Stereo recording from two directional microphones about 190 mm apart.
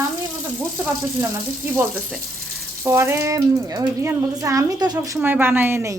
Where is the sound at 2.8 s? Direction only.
15° right (ahead or behind).